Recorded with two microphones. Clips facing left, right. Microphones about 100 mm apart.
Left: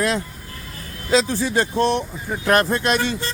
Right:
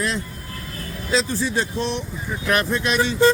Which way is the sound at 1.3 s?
60° left (ahead or behind).